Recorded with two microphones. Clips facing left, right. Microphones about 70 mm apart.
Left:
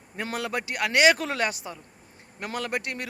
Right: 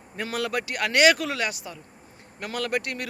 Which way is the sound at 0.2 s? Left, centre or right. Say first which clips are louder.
Right 2 dB; left.